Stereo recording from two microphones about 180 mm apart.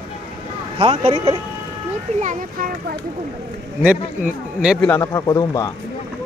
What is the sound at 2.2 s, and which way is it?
Speech, 50° right (ahead or behind).